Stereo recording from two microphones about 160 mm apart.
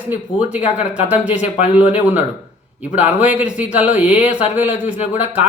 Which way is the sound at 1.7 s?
10° right (ahead or behind).